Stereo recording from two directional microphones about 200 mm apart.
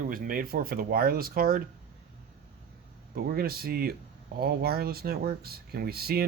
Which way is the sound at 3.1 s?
50° right (ahead or behind).